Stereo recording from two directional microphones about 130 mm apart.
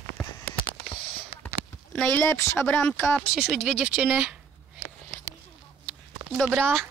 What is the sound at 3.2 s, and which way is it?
Speech, centre (ahead or behind).